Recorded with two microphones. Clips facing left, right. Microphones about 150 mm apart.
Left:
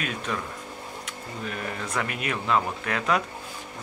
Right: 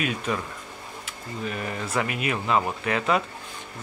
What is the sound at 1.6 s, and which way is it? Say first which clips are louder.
Speech: right 2 dB; 5° right (ahead or behind).